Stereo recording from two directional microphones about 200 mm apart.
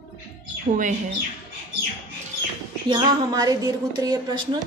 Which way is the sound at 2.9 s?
20° right (ahead or behind).